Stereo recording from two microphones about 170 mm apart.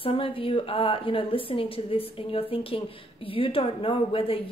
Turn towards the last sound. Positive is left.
turn(degrees=30)  # may be behind; listen again after turning